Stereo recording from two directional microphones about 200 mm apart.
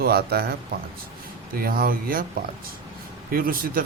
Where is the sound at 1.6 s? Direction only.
45° right (ahead or behind).